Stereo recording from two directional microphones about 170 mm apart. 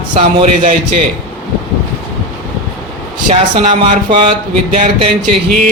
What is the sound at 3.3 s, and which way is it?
Speech, 35° right (ahead or behind).